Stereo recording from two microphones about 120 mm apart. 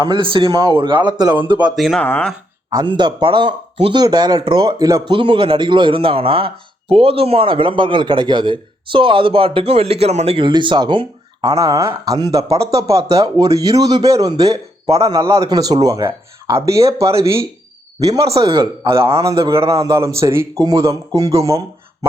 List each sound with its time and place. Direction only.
0.0 s a man's voice: 40° right (ahead or behind)
1.7 s speech: centre (ahead or behind)
2.0 s speech: 15° left (ahead or behind)
2.6 s a man's voice: 40° right (ahead or behind)
4.0 s a man's voice: 35° right (ahead or behind)
5.0 s a man's voice: 45° right (ahead or behind)
11.5 s a man's voice: 25° right (ahead or behind)
12.4 s speech: 55° right (ahead or behind)
13.1 s a man's voice: 30° right (ahead or behind)
18.6 s a man's voice: 45° right (ahead or behind)
19.2 s a man's voice: 25° right (ahead or behind)